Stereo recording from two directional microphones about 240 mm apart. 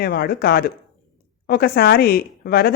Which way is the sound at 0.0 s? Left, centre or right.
Left.